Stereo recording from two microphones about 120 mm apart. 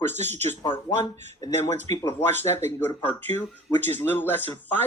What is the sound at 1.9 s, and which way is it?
Speech, 25° left (ahead or behind).